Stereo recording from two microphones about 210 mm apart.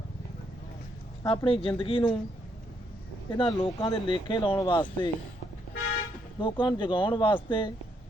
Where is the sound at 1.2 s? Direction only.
25° left (ahead or behind).